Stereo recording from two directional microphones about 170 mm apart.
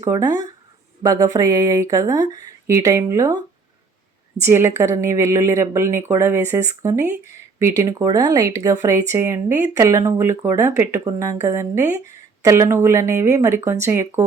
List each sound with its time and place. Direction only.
0.0 s a woman's voice: 20° right (ahead or behind)
4.4 s a woman's voice: 15° right (ahead or behind)